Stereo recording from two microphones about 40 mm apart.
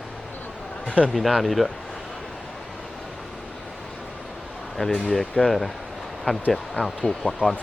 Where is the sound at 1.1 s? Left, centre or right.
Centre.